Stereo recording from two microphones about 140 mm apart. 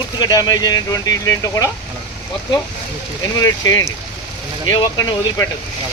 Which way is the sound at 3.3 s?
25° left (ahead or behind).